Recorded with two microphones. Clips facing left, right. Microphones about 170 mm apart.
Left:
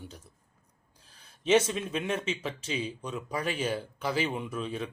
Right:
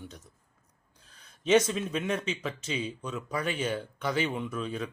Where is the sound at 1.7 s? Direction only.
30° left (ahead or behind).